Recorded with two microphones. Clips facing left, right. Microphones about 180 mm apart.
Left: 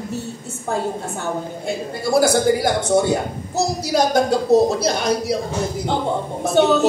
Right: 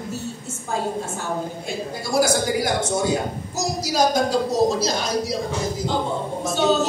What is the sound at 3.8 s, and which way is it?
A man's voice, 60° left (ahead or behind).